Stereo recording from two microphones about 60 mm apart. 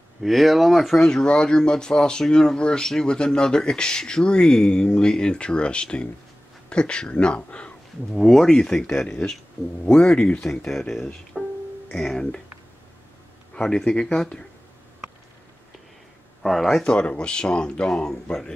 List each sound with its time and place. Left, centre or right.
0.2 s speech: centre
1.0 s speech: centre
8.2 s speech: centre
13.6 s speech: centre
16.4 s speech: centre